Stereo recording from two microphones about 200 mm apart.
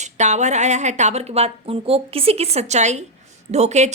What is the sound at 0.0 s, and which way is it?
A woman's voice, 35° right (ahead or behind).